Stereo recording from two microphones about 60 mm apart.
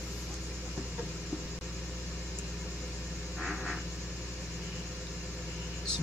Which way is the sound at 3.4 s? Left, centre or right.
Centre.